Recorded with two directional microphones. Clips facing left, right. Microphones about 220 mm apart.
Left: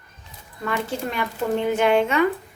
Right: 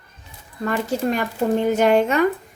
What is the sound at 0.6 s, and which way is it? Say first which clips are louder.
A woman's voice: right 5 dB; 40° right (ahead or behind).